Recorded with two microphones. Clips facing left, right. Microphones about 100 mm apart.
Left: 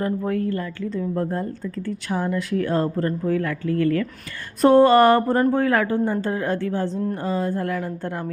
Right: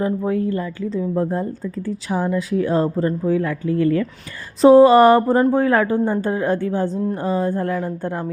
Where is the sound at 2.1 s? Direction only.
15° right (ahead or behind).